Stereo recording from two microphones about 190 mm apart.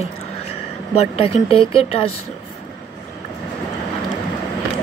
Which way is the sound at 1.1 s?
30° left (ahead or behind).